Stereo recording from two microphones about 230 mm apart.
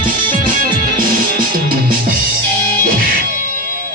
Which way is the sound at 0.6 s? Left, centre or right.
Right.